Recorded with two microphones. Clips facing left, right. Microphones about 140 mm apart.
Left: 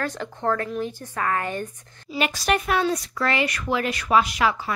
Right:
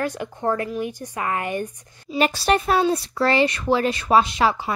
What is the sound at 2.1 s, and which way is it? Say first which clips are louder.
Speech: right 4 dB; 35° right (ahead or behind).